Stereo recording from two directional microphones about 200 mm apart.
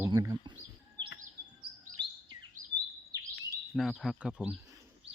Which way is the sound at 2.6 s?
40° right (ahead or behind).